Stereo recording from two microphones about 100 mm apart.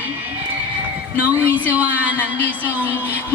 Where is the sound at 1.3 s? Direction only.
15° right (ahead or behind).